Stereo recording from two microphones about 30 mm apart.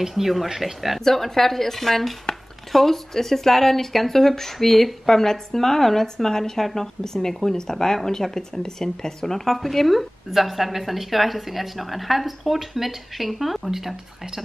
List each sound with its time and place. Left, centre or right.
0.1 s speech: centre
1.0 s speech: centre